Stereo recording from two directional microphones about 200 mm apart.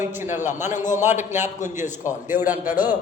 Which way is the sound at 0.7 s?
40° left (ahead or behind).